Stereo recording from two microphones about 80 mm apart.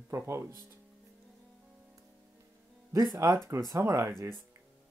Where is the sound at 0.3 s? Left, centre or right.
Right.